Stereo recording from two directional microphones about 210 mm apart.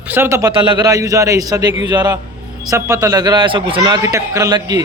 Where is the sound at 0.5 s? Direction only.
25° right (ahead or behind).